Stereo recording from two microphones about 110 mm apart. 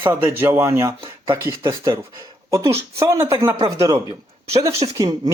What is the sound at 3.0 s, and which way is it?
Speech, 30° right (ahead or behind).